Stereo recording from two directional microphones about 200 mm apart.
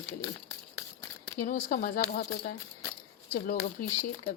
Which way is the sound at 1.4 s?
45° left (ahead or behind).